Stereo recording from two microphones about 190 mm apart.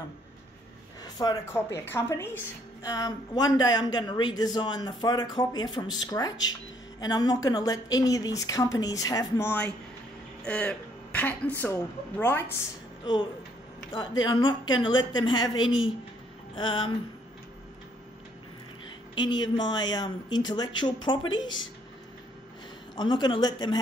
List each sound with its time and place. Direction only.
1.0 s a woman's voice: 20° left (ahead or behind)
13.0 s a woman's voice: 25° left (ahead or behind)
15.5 s a woman's voice: 90° left
16.5 s a woman's voice: 25° left (ahead or behind)
19.1 s a woman's voice: 25° left (ahead or behind)
22.9 s a woman's voice: 25° left (ahead or behind)